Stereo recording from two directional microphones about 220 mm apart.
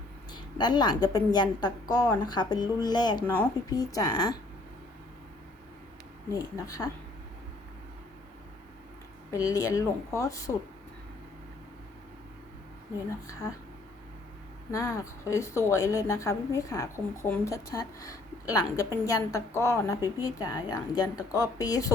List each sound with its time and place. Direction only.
0.3 s a woman's voice: 20° left (ahead or behind)
6.4 s a woman's voice: 15° left (ahead or behind)
9.3 s a woman's voice: 15° left (ahead or behind)
14.7 s a woman's voice: 15° left (ahead or behind)